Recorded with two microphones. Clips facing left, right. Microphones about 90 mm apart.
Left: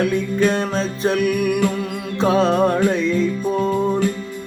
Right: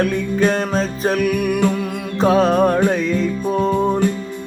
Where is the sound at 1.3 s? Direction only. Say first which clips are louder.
Even; 40° right (ahead or behind).